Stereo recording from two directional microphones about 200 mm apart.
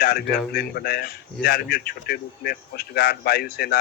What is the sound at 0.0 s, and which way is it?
Speech, 50° left (ahead or behind).